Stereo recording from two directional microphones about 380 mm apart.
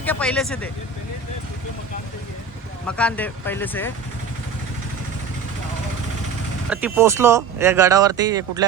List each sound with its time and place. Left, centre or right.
0.0 s speech: centre
2.8 s speech: centre
6.7 s speech: centre